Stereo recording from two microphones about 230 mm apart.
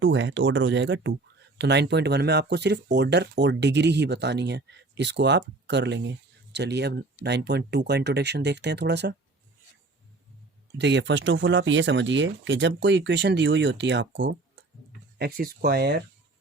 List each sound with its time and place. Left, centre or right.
0.0 s speech: right
10.8 s speech: right
15.2 s speech: right